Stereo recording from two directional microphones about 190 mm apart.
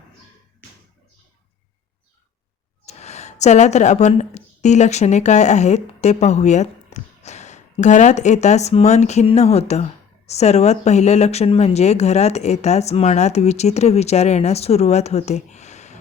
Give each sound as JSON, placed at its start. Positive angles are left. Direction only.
{"t": 2.8, "sound": "speech", "side_deg": 35}